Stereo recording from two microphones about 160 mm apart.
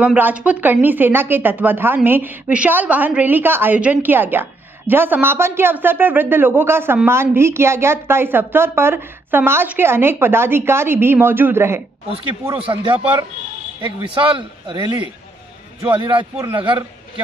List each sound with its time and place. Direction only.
0.0 s a woman's voice: 10° right (ahead or behind)
12.6 s a man's voice: 35° right (ahead or behind)
15.9 s a man's voice: 35° right (ahead or behind)